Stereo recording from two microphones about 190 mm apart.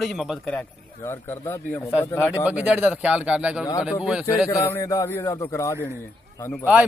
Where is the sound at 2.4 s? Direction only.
5° right (ahead or behind).